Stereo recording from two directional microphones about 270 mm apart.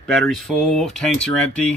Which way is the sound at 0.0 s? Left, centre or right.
Centre.